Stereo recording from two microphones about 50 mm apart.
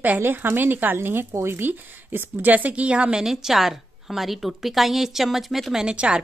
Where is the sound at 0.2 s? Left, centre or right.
Right.